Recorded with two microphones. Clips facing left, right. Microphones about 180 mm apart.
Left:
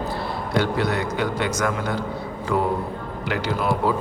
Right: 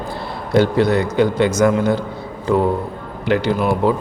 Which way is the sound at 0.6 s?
30° right (ahead or behind).